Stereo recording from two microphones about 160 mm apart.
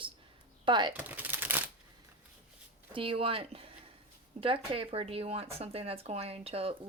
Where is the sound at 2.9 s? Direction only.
35° right (ahead or behind).